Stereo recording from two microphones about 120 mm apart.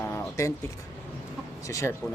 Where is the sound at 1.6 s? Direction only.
25° left (ahead or behind).